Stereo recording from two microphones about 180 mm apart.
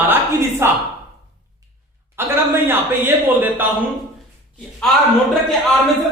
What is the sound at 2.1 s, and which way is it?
A man's voice, 15° right (ahead or behind).